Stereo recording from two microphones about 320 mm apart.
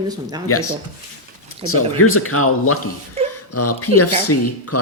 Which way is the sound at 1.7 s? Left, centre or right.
Left.